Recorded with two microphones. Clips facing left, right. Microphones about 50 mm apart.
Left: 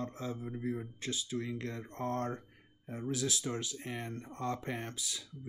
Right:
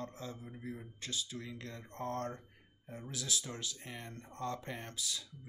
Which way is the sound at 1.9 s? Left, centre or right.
Centre.